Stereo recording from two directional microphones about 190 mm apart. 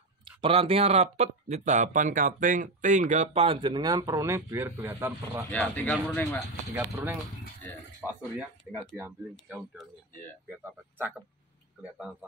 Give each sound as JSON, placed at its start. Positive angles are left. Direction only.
{"t": 0.4, "sound": "speech", "side_deg": -30}
{"t": 5.5, "sound": "speech", "side_deg": 5}
{"t": 6.7, "sound": "speech", "side_deg": -10}